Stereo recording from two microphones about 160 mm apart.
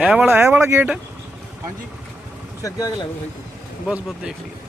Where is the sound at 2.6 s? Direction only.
20° left (ahead or behind).